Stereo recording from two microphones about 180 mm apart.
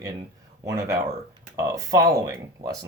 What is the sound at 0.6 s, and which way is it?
Speech, 15° right (ahead or behind).